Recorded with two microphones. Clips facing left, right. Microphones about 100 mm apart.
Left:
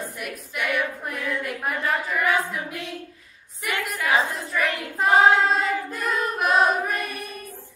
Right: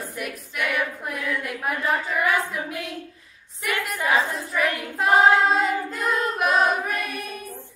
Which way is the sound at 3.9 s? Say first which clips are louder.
Even; 15° right (ahead or behind).